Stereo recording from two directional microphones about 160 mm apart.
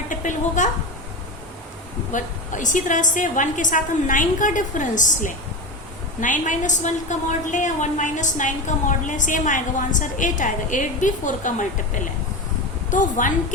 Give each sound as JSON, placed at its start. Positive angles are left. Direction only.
{"t": 0.1, "sound": "a sound", "side_deg": 50}
{"t": 2.1, "sound": "a woman's voice", "side_deg": 50}
{"t": 12.9, "sound": "a woman's voice", "side_deg": 55}